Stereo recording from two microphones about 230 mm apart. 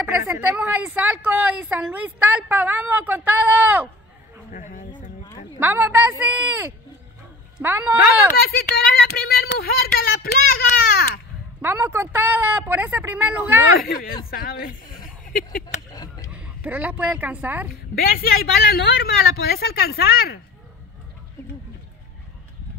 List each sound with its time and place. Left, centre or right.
0.0 s a woman's voice: centre
4.5 s a sound: left
5.6 s a woman's voice: centre
8.0 s speech: left
11.6 s a woman's voice: centre
13.8 s speech: left
15.9 s a sound: centre
16.3 s speech: centre
17.9 s speech: left